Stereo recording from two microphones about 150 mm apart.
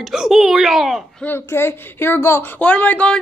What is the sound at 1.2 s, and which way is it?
A woman's voice, 15° left (ahead or behind).